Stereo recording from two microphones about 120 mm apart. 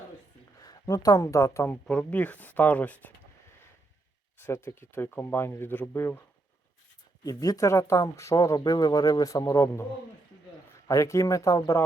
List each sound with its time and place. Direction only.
0.6 s speech: 35° left (ahead or behind)
1.6 s speech: 15° left (ahead or behind)
4.4 s speech: 20° left (ahead or behind)
7.3 s speech: 30° left (ahead or behind)
10.8 s speech: 25° left (ahead or behind)